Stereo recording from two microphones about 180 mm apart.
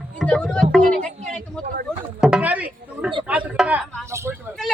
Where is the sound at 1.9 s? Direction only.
5° right (ahead or behind).